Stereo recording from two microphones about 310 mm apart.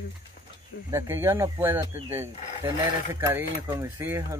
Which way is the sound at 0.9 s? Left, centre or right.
Centre.